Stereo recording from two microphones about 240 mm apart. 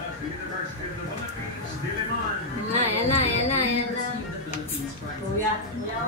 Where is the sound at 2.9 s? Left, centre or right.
Left.